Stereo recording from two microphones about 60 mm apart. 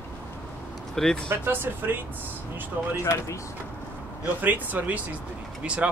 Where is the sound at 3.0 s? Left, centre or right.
Left.